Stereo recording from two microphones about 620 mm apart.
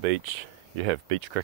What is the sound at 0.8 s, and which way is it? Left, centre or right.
Speech, right.